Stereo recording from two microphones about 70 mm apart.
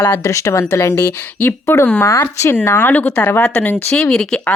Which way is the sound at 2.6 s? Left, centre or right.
Left.